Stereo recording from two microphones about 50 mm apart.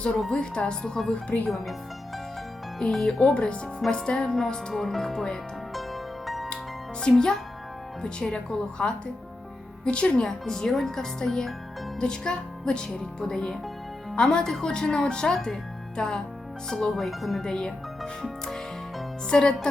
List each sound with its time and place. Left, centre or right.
0.3 s speech: centre
1.1 s speech: left
1.5 s speech: centre
2.7 s speech: centre
5.7 s music: centre
7.0 s speech: centre
17.4 s speech: centre